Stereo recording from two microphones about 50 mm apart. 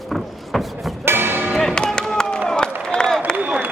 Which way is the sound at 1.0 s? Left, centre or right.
Right.